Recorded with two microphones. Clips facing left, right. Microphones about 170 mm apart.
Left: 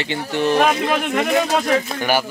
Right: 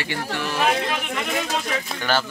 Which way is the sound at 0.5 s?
55° left (ahead or behind).